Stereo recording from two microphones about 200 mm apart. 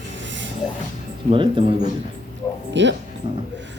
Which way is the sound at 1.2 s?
25° right (ahead or behind).